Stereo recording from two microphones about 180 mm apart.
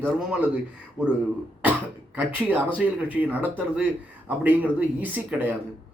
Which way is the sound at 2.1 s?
10° right (ahead or behind).